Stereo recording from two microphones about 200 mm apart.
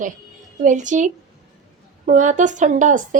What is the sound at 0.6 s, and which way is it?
A woman's voice, 40° right (ahead or behind).